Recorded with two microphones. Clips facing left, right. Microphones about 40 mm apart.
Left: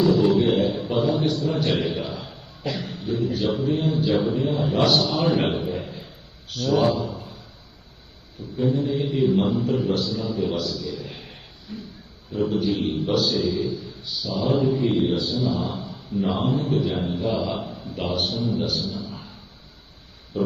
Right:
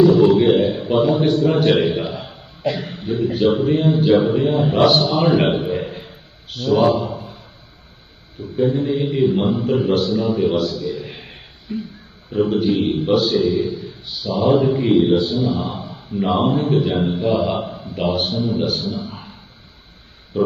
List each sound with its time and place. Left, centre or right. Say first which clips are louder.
0.0 s a man's voice: right 6 dB; right
6.5 s a man's voice: right 5 dB; right
6.9 s a sound: right 5 dB; right
8.4 s a man's voice: right 5 dB; right